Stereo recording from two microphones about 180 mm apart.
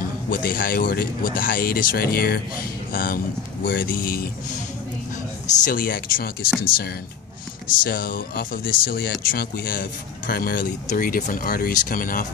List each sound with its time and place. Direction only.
0.3 s speech: 55° left (ahead or behind)
7.8 s speech: 55° left (ahead or behind)